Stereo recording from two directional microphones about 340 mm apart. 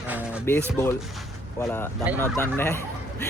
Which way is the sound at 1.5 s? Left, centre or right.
Centre.